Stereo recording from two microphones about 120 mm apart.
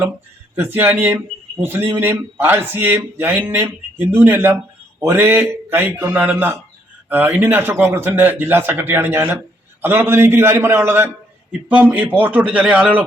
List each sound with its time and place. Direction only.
0.5 s a man's voice: 20° right (ahead or behind)